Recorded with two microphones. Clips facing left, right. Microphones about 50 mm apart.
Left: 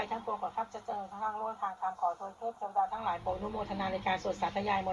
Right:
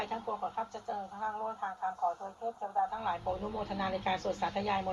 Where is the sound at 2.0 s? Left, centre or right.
Left.